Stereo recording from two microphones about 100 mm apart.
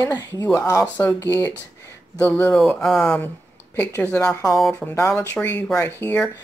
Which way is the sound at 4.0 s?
20° left (ahead or behind).